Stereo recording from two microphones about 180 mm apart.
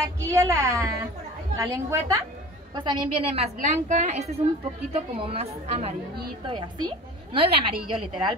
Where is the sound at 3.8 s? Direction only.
40° right (ahead or behind).